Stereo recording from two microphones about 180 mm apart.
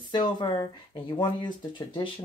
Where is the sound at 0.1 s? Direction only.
25° left (ahead or behind).